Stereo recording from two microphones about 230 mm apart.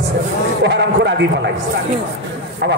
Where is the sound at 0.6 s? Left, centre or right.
Right.